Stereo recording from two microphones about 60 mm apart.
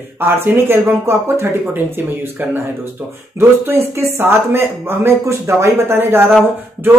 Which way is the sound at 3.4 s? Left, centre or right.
Right.